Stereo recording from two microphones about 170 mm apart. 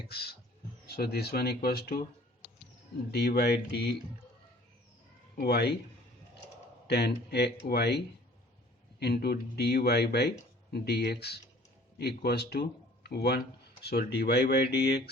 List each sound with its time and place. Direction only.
0.1 s speech: 70° left (ahead or behind)
3.1 s speech: 70° left (ahead or behind)
5.4 s speech: 70° left (ahead or behind)
6.8 s speech: 75° left (ahead or behind)